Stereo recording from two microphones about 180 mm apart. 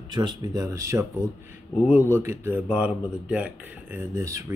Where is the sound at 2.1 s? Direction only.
15° right (ahead or behind).